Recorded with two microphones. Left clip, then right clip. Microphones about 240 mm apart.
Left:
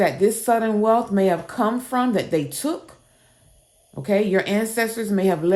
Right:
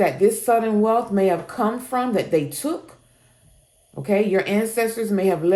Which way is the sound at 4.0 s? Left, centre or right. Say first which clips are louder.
Even; left.